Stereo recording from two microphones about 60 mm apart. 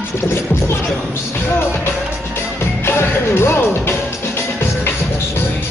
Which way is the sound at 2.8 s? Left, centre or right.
Left.